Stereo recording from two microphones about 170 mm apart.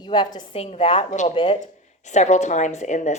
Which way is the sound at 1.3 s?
35° left (ahead or behind).